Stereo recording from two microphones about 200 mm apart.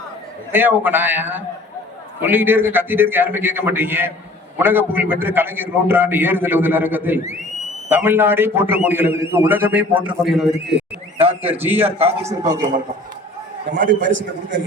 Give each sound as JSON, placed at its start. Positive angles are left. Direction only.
{"t": 0.5, "sound": "a man's voice", "side_deg": -10}
{"t": 13.7, "sound": "a man's voice", "side_deg": -65}